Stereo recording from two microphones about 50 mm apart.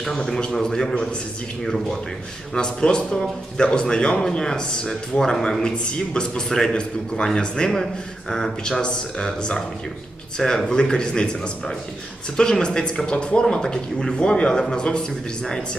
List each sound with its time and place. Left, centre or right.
0.2 s a man's voice: centre